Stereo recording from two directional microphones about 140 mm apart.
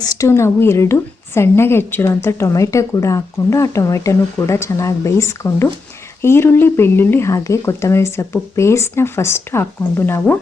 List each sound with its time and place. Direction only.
0.0 s a woman's voice: 25° left (ahead or behind)